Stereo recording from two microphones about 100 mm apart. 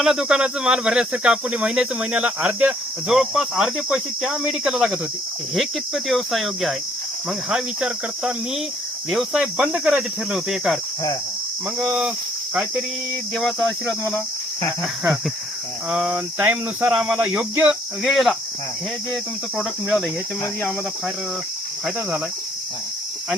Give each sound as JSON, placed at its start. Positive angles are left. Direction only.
{"t": 0.0, "sound": "speech", "side_deg": -5}
{"t": 3.1, "sound": "speech", "side_deg": -5}
{"t": 5.5, "sound": "cricket", "side_deg": 0}
{"t": 7.3, "sound": "speech", "side_deg": -10}
{"t": 9.0, "sound": "cricket", "side_deg": -5}
{"t": 11.8, "sound": "speech", "side_deg": -10}
{"t": 13.3, "sound": "cricket", "side_deg": 5}
{"t": 15.9, "sound": "speech", "side_deg": -10}
{"t": 16.1, "sound": "speech", "side_deg": -20}
{"t": 18.0, "sound": "cricket", "side_deg": 0}